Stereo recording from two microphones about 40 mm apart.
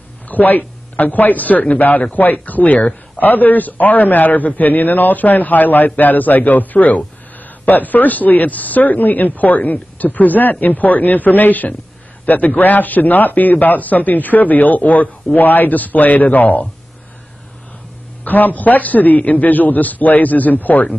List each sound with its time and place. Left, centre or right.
0.3 s a man's voice: left
15.3 s a man's voice: left
18.2 s a man's voice: left